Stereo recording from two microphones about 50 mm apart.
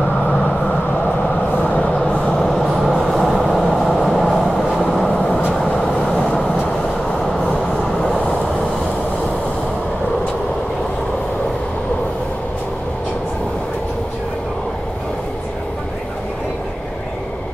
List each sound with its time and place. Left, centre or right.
2.0 s vehicle: centre
2.3 s train: centre
2.7 s train: centre
3.1 s vehicle: centre
3.9 s train: centre
4.7 s vehicle: centre
5.8 s vehicle: centre